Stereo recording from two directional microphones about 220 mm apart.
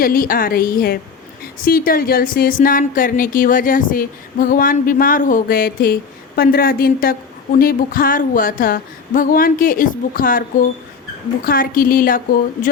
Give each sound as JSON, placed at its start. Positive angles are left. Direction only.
{"t": 0.0, "sound": "a woman's voice", "side_deg": 40}